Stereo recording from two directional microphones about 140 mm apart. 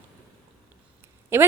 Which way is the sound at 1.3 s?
15° right (ahead or behind).